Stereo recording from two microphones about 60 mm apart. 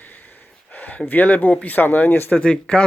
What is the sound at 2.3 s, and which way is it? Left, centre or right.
Speech, left.